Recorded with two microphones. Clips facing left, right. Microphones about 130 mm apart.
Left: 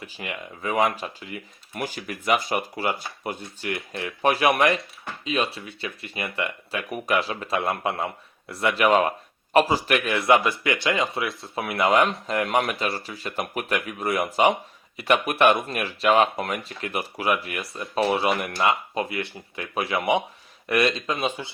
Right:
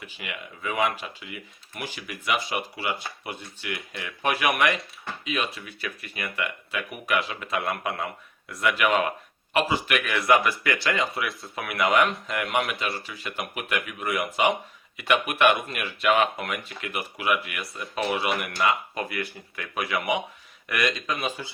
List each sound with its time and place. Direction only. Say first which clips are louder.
0.0 s speech: left 3 dB; 35° left (ahead or behind)